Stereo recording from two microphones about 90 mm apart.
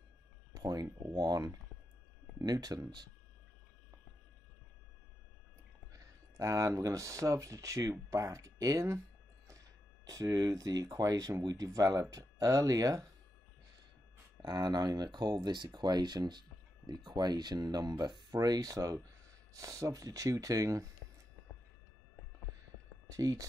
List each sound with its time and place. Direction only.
0.6 s speech: 45° right (ahead or behind)
5.9 s speech: 35° right (ahead or behind)
10.0 s speech: 40° right (ahead or behind)
14.4 s speech: 50° right (ahead or behind)
23.0 s speech: 40° right (ahead or behind)